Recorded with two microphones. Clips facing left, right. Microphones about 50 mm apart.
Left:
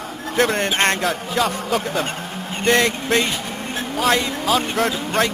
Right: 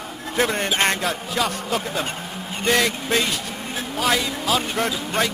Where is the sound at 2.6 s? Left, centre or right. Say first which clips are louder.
Left 3 dB; centre.